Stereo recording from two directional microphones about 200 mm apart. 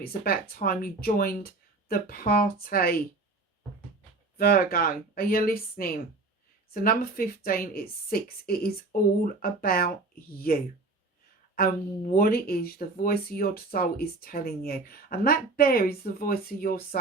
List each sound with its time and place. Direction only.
0.0 s speech: 50° left (ahead or behind)
4.4 s speech: 50° left (ahead or behind)